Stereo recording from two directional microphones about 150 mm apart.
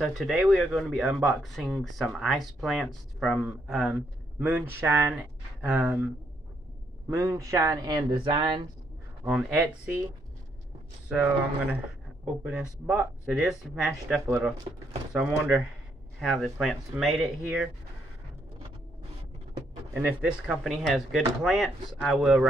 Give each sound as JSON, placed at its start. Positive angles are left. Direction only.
{"t": 0.0, "sound": "speech", "side_deg": 0}
{"t": 7.1, "sound": "speech", "side_deg": -20}
{"t": 9.2, "sound": "speech", "side_deg": -10}
{"t": 11.1, "sound": "speech", "side_deg": -10}
{"t": 19.9, "sound": "speech", "side_deg": -10}